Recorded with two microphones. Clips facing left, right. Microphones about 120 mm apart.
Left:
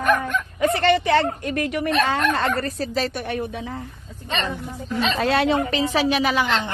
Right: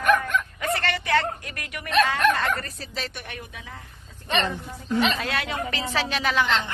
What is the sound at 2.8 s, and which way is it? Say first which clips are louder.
A woman's voice: left 10 dB; 40° left (ahead or behind).